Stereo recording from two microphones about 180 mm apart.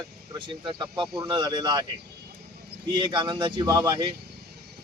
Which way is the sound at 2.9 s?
25° right (ahead or behind).